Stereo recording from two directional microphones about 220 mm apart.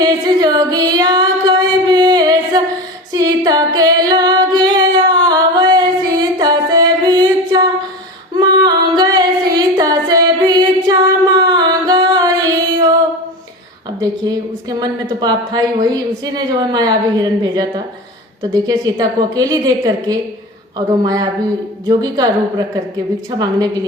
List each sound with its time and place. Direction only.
0.0 s singing: 20° right (ahead or behind)
3.1 s female singing: 15° right (ahead or behind)
8.4 s singing: 20° right (ahead or behind)
14.0 s a woman's voice: 20° right (ahead or behind)